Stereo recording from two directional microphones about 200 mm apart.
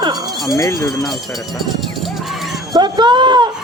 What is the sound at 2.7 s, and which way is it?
Speech, 20° right (ahead or behind).